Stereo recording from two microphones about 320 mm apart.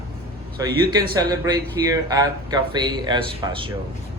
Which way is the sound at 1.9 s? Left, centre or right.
Centre.